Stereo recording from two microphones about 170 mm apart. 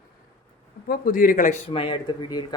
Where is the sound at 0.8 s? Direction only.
60° left (ahead or behind).